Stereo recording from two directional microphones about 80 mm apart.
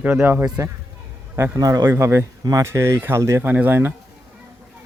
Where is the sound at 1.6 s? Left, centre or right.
Right.